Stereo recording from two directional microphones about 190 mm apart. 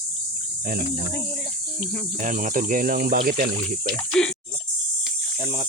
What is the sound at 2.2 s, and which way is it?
Speech, 40° right (ahead or behind).